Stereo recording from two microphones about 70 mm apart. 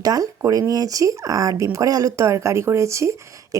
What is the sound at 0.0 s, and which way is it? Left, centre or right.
A woman's voice, right.